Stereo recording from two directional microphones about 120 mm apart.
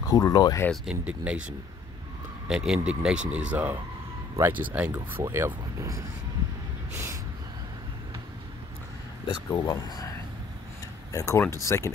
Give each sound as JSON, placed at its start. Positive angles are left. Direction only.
{"t": 0.1, "sound": "speech", "side_deg": 30}
{"t": 0.8, "sound": "speech", "side_deg": -10}
{"t": 6.9, "sound": "gasp", "side_deg": -20}
{"t": 9.5, "sound": "speech", "side_deg": 35}